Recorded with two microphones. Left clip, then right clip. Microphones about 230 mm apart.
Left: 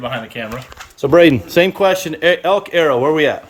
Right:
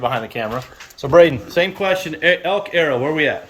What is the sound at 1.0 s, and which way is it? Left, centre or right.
Speech, left.